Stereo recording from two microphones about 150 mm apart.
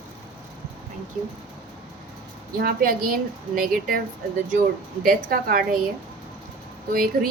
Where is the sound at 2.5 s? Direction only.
75° right (ahead or behind).